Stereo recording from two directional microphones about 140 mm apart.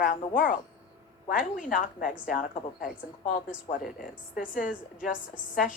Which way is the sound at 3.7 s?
55° left (ahead or behind).